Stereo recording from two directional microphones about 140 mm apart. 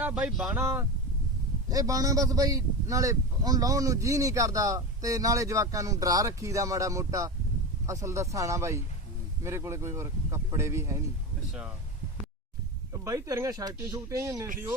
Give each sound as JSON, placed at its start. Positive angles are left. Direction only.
{"t": 0.0, "sound": "speech", "side_deg": -10}
{"t": 1.7, "sound": "a man's voice", "side_deg": -25}
{"t": 12.9, "sound": "a man's voice", "side_deg": -25}